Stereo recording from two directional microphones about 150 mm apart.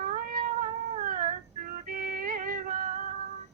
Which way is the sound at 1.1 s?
60° right (ahead or behind).